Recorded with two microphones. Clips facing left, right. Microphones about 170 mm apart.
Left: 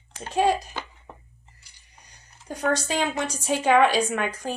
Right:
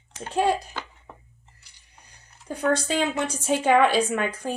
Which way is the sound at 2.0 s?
60° right (ahead or behind).